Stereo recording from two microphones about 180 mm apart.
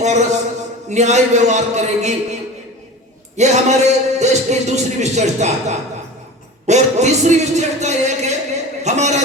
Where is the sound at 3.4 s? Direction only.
40° right (ahead or behind).